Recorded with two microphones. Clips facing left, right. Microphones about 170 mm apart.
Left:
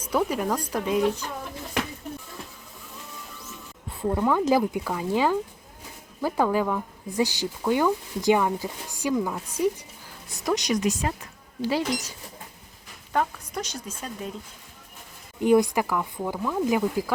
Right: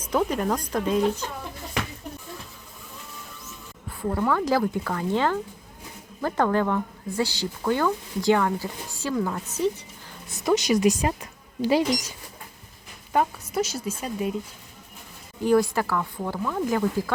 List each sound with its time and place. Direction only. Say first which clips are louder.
0.0 s speech: right 1 dB; 10° left (ahead or behind)
4.0 s speech: left 1 dB; 15° left (ahead or behind)
10.3 s a woman's voice: right 4 dB; centre (ahead or behind); by 12.0 s 15° right (ahead or behind)
13.1 s speech: right 3 dB; 5° right (ahead or behind)
15.4 s speech: left 1 dB; 20° left (ahead or behind)